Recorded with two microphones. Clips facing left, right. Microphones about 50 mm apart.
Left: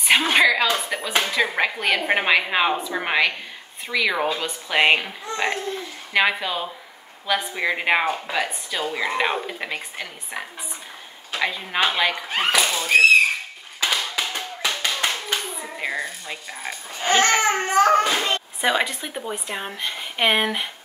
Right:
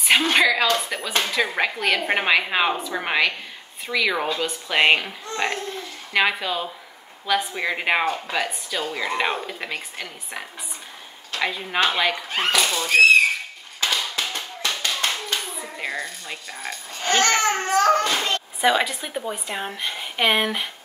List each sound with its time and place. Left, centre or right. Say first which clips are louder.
0.2 s a woman's voice: left 1 dB; centre
11.4 s a woman's voice: even; centre
13.7 s hands: left 1 dB; centre
15.8 s speech: left 2 dB; centre
18.6 s speech: right 3 dB; centre